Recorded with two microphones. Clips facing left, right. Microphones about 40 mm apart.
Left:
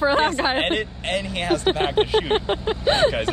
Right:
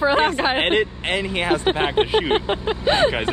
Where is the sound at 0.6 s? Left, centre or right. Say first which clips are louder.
Right 4 dB; right.